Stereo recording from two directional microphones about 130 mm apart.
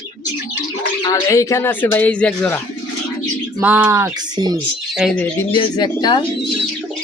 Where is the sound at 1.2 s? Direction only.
20° left (ahead or behind).